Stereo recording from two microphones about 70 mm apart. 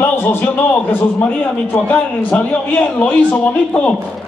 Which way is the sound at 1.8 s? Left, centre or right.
Left.